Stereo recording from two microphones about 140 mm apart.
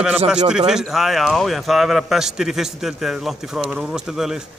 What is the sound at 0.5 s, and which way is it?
A man's voice, 5° right (ahead or behind).